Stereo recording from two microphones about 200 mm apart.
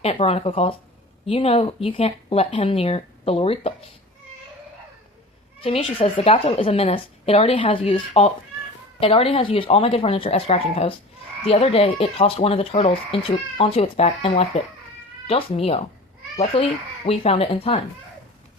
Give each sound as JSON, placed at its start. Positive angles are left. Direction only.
{"t": 0.0, "sound": "speech", "side_deg": 30}
{"t": 5.5, "sound": "speech", "side_deg": 25}